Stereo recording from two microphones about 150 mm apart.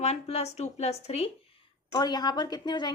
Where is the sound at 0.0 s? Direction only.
45° left (ahead or behind).